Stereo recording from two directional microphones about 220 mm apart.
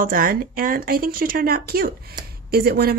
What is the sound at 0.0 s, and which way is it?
A woman's voice, 40° right (ahead or behind).